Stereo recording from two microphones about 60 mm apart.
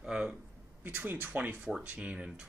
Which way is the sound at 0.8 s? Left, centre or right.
Right.